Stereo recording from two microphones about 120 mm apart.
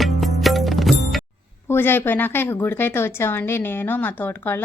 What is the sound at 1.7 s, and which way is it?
Speech, 15° left (ahead or behind).